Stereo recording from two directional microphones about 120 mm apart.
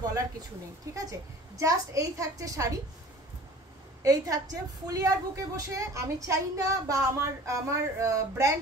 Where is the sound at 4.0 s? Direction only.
30° right (ahead or behind).